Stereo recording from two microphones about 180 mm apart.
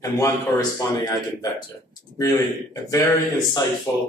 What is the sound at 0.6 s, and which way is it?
A man's voice, 20° left (ahead or behind).